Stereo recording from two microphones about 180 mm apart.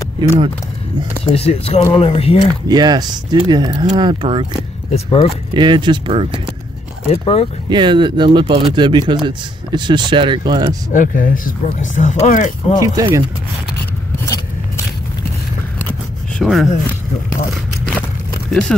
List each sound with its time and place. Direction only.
1.2 s speech: 35° left (ahead or behind)
2.7 s speech: 20° right (ahead or behind)
4.9 s speech: 35° left (ahead or behind)
5.5 s speech: 25° right (ahead or behind)
7.1 s speech: 35° left (ahead or behind)
7.7 s speech: 25° right (ahead or behind)
10.9 s speech: 50° left (ahead or behind)
12.8 s speech: 20° right (ahead or behind)
16.3 s a sound: centre (ahead or behind)
18.5 s speech: 5° left (ahead or behind)